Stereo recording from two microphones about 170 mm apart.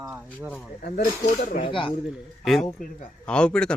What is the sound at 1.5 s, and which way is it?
Speech, 35° left (ahead or behind).